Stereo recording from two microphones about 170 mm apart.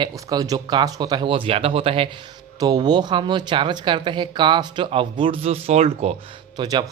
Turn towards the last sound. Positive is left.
turn(degrees=-25)  # may be behind; listen again after turning